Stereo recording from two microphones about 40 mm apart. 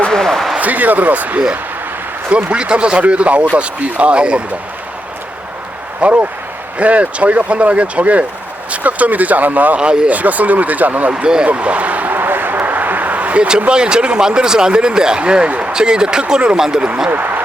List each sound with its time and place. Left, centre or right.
0.3 s a sound: centre
0.6 s speech: right
2.3 s speech: right
6.0 s speech: right
9.7 s speech: right
10.1 s speech: right
11.1 s speech: right
11.4 s speech: right
12.1 s a sound: right
13.6 s speech: right
15.7 s speech: right
16.6 s speech: centre
17.1 s speech: right